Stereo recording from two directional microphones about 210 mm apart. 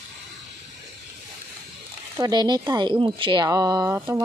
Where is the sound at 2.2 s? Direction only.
20° right (ahead or behind).